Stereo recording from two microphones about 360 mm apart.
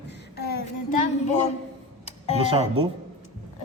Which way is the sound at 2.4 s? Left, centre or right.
Centre.